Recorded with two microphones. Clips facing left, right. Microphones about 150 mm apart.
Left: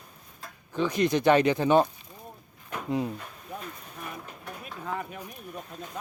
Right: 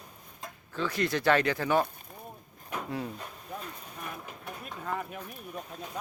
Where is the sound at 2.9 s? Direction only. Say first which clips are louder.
Left 8 dB; 20° left (ahead or behind).